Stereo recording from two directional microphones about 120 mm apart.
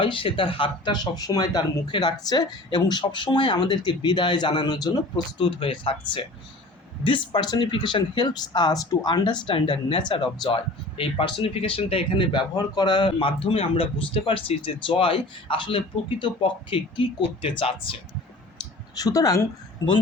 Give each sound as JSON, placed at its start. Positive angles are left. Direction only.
{"t": 0.0, "sound": "speech", "side_deg": 45}
{"t": 5.5, "sound": "speech", "side_deg": 50}
{"t": 18.9, "sound": "speech", "side_deg": 30}